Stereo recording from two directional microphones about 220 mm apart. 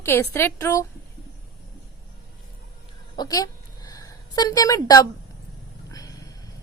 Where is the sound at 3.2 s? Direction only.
15° left (ahead or behind).